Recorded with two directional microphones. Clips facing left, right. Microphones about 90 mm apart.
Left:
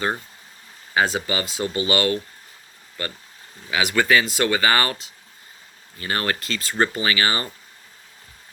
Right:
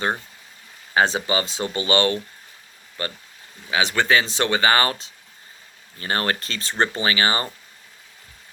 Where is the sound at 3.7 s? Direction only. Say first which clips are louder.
Even; 30° right (ahead or behind).